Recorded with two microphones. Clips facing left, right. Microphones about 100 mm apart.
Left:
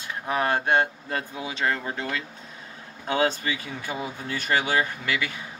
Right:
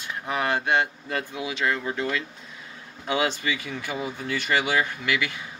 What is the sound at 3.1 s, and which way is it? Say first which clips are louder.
Speech: left 1 dB; 40° left (ahead or behind).